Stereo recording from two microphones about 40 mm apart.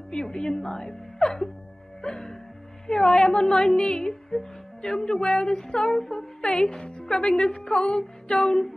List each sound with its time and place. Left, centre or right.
0.1 s music: centre
7.5 s a woman's voice: centre
8.4 s music: centre